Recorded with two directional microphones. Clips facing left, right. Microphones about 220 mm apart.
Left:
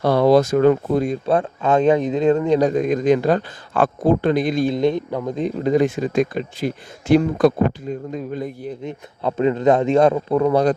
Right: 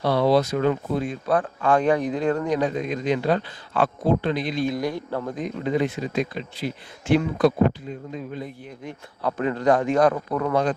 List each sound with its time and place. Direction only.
0.0 s speech: 50° left (ahead or behind)
1.2 s a man's voice: 25° left (ahead or behind)
2.6 s speech: 45° left (ahead or behind)
4.6 s a man's voice: 25° left (ahead or behind)
5.6 s speech: 45° left (ahead or behind)
8.8 s a man's voice: 20° left (ahead or behind)